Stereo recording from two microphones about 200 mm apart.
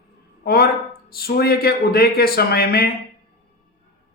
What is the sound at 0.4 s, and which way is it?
A man's voice, 50° left (ahead or behind).